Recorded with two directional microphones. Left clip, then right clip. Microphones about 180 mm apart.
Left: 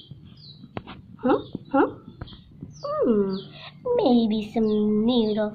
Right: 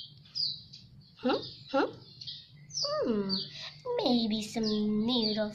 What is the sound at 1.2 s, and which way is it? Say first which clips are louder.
Speech: left 8 dB; 20° right (ahead or behind).